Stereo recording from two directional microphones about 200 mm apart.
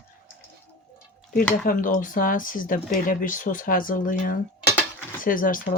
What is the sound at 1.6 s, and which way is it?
Speech, 40° left (ahead or behind).